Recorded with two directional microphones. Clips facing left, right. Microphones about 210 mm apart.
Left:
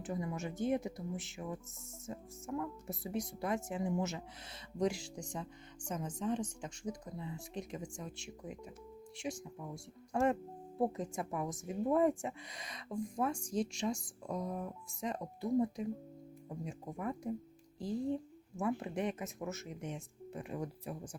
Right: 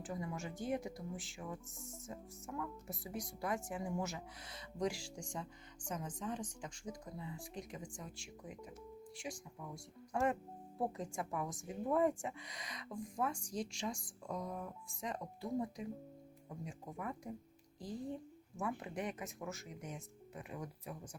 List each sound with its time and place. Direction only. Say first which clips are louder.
0.0 s speech: left 4 dB; 20° left (ahead or behind)
2.6 s speech: left 3 dB; 25° left (ahead or behind)
18.5 s speech: left 5 dB; 25° left (ahead or behind)